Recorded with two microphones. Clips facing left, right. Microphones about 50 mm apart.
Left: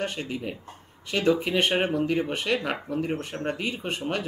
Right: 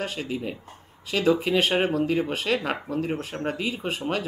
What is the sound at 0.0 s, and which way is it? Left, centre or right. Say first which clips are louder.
Speech: right 1 dB; centre.